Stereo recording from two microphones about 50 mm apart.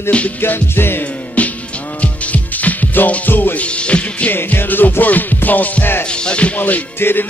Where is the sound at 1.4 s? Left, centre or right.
Left.